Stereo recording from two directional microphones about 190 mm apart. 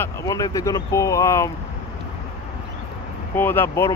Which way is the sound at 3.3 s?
10° left (ahead or behind).